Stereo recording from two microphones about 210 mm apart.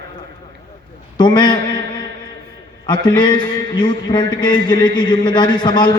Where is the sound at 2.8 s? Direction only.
20° left (ahead or behind).